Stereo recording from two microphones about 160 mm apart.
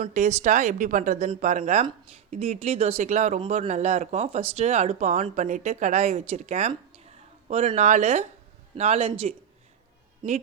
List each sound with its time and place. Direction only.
0.0 s a man's voice: 50° right (ahead or behind)